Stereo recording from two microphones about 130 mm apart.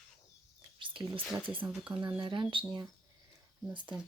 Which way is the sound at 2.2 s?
35° right (ahead or behind).